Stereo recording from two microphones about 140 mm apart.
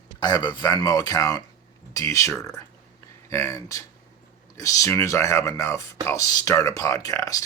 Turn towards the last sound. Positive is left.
turn(degrees=25)  # may be behind; listen again after turning